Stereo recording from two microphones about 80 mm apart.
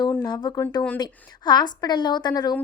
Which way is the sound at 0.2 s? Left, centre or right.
Left.